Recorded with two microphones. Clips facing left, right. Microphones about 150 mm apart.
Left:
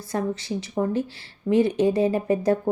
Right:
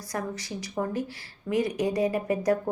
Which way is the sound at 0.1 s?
25° left (ahead or behind).